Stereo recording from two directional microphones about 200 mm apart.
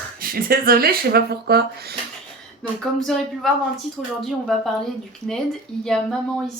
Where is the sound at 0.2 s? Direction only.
45° right (ahead or behind).